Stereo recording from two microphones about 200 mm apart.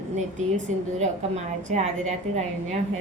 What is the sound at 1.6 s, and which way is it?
A woman's voice, 35° right (ahead or behind).